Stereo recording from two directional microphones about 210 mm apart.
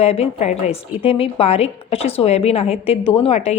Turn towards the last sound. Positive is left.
turn(degrees=30)  # may be behind; listen again after turning